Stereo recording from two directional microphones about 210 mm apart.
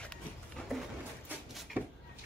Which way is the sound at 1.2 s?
Centre (ahead or behind).